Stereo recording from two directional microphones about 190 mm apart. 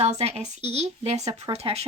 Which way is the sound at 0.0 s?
35° right (ahead or behind).